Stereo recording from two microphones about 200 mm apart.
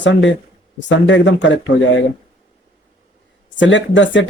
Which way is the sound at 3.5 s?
65° left (ahead or behind).